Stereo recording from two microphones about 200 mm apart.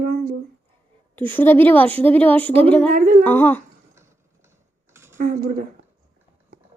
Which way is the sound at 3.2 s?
10° left (ahead or behind).